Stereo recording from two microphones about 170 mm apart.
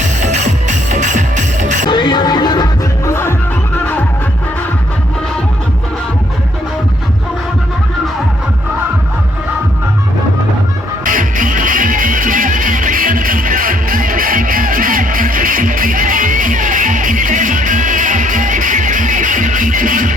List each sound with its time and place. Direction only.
0.2 s music: 45° right (ahead or behind)
1.9 s music: 25° left (ahead or behind)
3.1 s music: 15° left (ahead or behind)
11.0 s music: 50° right (ahead or behind)